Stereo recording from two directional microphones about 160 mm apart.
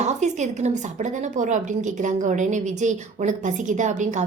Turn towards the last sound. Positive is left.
turn(degrees=-50)  # may be behind; listen again after turning